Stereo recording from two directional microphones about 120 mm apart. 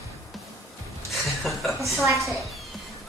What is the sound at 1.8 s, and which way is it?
Speech, 25° right (ahead or behind).